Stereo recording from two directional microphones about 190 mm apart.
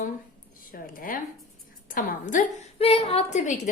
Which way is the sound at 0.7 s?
45° left (ahead or behind).